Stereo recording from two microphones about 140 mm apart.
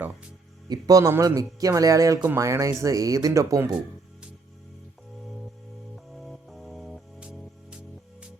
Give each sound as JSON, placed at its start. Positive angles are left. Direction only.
{"t": 0.7, "sound": "speech", "side_deg": -25}
{"t": 6.1, "sound": "music", "side_deg": 0}